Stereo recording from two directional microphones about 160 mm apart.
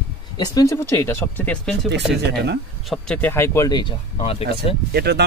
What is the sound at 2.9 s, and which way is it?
Speech, 5° left (ahead or behind).